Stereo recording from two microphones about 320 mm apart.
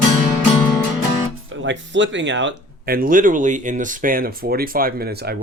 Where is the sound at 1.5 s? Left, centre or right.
Right.